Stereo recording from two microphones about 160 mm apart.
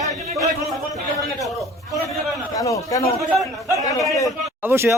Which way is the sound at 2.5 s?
20° left (ahead or behind).